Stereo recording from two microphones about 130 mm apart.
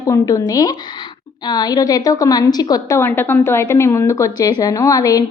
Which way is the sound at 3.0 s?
15° left (ahead or behind).